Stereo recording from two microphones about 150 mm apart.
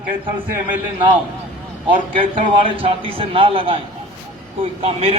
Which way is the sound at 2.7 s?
35° right (ahead or behind).